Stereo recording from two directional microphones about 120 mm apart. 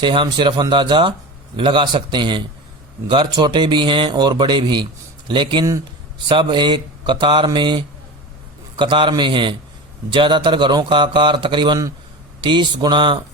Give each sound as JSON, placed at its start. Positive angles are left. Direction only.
{"t": 0.0, "sound": "speech", "side_deg": -45}